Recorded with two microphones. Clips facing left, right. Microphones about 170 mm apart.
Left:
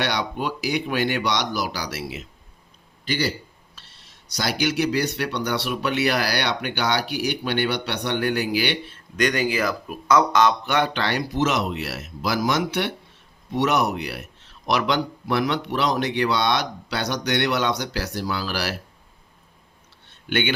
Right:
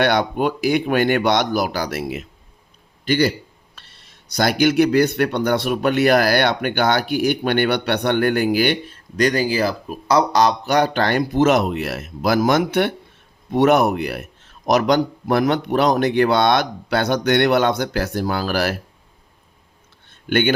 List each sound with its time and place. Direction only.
0.0 s speech: 55° right (ahead or behind)